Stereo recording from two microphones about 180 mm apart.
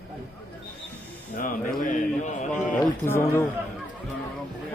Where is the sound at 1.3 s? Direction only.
50° left (ahead or behind).